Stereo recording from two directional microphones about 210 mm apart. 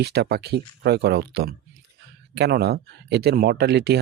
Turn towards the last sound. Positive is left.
turn(degrees=-50)  # may be behind; listen again after turning